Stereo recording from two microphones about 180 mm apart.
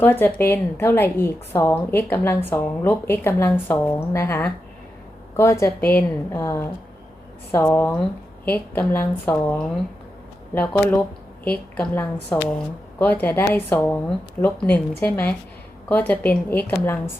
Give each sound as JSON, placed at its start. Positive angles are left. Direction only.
{"t": 0.0, "sound": "a woman's voice", "side_deg": 10}